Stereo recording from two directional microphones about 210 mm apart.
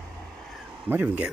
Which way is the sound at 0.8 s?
10° right (ahead or behind).